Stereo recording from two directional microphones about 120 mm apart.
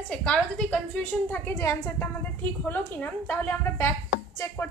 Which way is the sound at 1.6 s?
25° left (ahead or behind).